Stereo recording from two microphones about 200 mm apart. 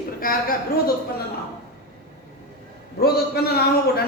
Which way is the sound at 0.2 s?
45° left (ahead or behind).